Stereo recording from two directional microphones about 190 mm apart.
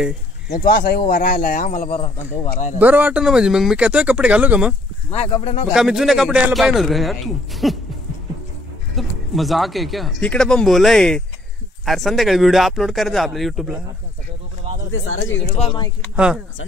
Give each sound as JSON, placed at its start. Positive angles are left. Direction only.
{"t": 0.6, "sound": "speech", "side_deg": 50}
{"t": 2.8, "sound": "speech", "side_deg": -10}
{"t": 5.1, "sound": "speech", "side_deg": 35}
{"t": 5.7, "sound": "speech", "side_deg": -5}
{"t": 8.9, "sound": "speech", "side_deg": 0}
{"t": 14.9, "sound": "speech", "side_deg": 90}
{"t": 15.6, "sound": "speech", "side_deg": 25}